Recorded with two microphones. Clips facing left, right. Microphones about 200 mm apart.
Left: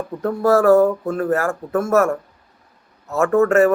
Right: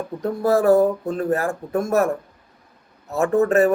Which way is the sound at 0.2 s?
15° right (ahead or behind).